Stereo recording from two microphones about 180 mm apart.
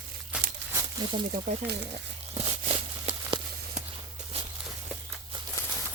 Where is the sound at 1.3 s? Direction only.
60° right (ahead or behind).